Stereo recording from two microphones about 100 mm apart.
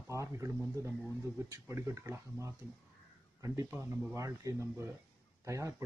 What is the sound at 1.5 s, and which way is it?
A man's voice, 30° right (ahead or behind).